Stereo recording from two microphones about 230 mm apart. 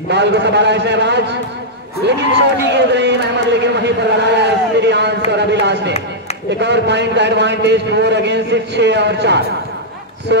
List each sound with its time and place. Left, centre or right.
0.1 s a man's voice: right
3.6 s a sound: right
5.3 s a man's voice: right